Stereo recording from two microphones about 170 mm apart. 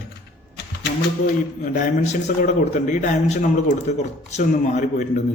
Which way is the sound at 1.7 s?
45° left (ahead or behind).